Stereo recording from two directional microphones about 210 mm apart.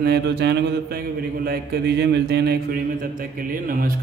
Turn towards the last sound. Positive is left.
turn(degrees=-40)  # may be behind; listen again after turning